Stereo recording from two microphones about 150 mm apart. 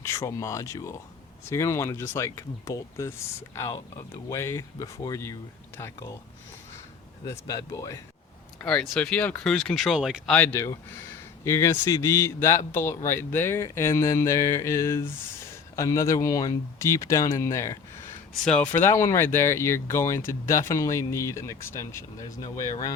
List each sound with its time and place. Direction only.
0.0 s speech: 15° left (ahead or behind)
7.3 s speech: 25° left (ahead or behind)
8.6 s speech: 5° left (ahead or behind)
10.3 s speech: 15° left (ahead or behind)
18.4 s speech: 5° left (ahead or behind)